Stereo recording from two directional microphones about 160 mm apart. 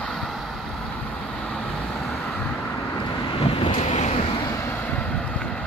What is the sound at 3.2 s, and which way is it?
Vehicle, 35° left (ahead or behind).